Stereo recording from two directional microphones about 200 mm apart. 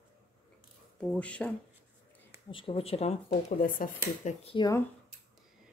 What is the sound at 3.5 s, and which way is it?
Speech, 45° left (ahead or behind).